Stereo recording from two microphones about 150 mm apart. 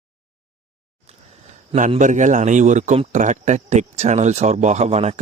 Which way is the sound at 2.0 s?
55° right (ahead or behind).